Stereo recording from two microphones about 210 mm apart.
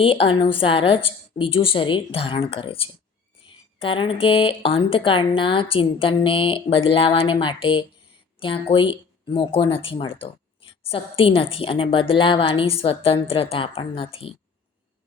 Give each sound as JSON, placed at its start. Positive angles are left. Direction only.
{"t": 0.0, "sound": "speech", "side_deg": 25}